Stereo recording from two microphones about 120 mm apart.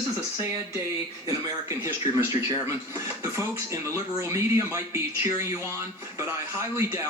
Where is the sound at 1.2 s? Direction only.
25° right (ahead or behind).